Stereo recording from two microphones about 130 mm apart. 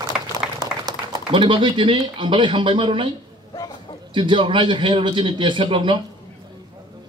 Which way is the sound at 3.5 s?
30° left (ahead or behind).